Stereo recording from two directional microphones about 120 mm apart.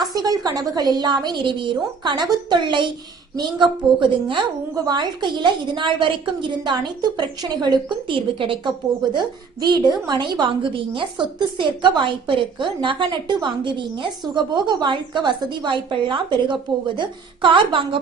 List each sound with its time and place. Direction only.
0.0 s a woman's voice: 35° right (ahead or behind)